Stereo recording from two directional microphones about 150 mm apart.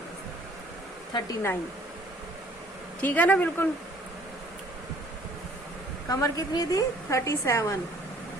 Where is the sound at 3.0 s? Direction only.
10° left (ahead or behind).